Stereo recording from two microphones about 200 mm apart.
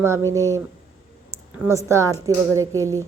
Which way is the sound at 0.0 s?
15° right (ahead or behind).